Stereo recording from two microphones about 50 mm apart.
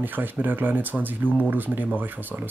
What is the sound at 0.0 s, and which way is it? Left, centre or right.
Speech, right.